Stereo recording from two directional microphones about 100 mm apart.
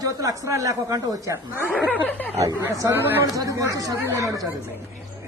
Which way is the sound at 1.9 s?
15° left (ahead or behind).